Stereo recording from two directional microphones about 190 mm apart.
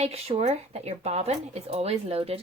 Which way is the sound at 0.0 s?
35° right (ahead or behind).